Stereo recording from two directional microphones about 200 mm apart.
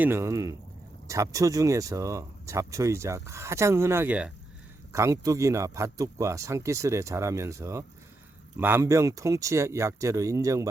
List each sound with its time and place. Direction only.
0.0 s speech: 15° right (ahead or behind)